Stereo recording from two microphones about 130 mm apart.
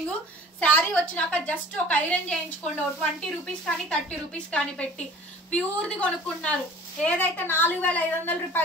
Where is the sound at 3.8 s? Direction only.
10° left (ahead or behind).